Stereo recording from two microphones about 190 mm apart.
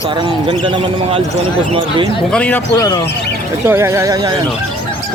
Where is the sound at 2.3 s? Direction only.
10° left (ahead or behind).